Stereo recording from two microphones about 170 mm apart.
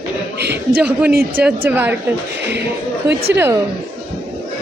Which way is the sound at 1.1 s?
65° right (ahead or behind).